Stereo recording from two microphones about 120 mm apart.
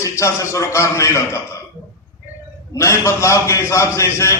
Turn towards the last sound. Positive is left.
turn(degrees=25)  # may be behind; listen again after turning